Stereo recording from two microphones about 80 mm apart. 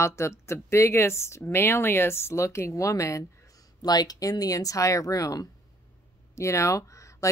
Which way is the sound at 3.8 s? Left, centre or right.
Left.